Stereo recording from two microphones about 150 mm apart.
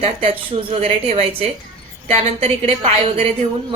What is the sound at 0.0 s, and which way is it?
A woman's voice, 40° right (ahead or behind).